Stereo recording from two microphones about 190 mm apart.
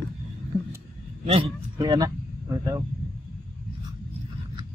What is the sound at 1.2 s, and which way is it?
Speech, 30° right (ahead or behind).